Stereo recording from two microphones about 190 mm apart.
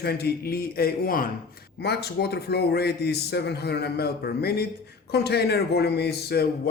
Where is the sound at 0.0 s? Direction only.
55° left (ahead or behind).